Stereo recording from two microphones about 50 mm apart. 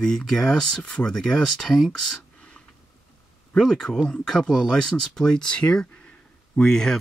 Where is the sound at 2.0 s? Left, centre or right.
Centre.